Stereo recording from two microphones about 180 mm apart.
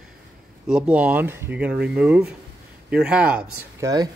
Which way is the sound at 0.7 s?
5° right (ahead or behind).